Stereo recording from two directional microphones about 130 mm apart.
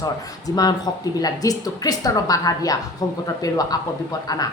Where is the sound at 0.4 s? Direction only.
30° left (ahead or behind).